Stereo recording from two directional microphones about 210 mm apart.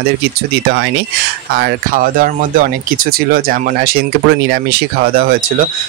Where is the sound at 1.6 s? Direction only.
40° right (ahead or behind).